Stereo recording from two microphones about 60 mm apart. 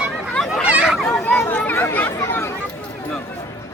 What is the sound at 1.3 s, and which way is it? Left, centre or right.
Chatter, left.